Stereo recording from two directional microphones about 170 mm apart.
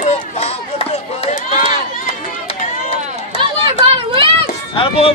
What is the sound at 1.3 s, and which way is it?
Run, 40° left (ahead or behind).